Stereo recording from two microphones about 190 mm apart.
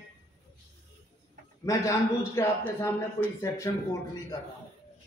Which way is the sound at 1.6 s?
15° left (ahead or behind).